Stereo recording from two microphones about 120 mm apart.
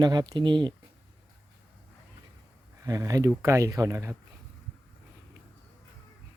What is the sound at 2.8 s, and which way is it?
Speech, 25° right (ahead or behind).